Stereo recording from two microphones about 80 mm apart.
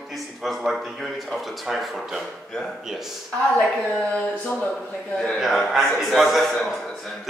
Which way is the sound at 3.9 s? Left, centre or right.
Centre.